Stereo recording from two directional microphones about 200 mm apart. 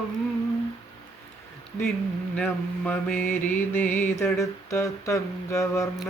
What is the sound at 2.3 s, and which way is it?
Mantra, 10° left (ahead or behind).